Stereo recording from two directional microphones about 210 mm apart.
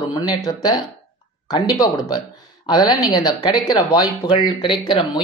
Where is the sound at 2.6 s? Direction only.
20° left (ahead or behind).